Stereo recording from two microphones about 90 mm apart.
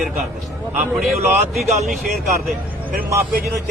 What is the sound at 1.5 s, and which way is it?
Speech, centre (ahead or behind).